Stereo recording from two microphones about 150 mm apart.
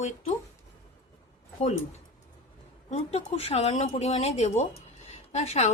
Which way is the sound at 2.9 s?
40° left (ahead or behind).